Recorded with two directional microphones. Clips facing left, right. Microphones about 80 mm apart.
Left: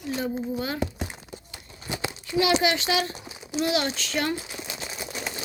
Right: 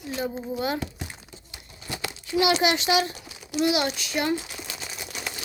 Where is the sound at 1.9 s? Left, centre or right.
Centre.